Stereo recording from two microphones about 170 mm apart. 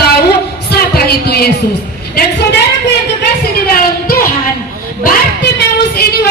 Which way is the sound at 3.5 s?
60° left (ahead or behind).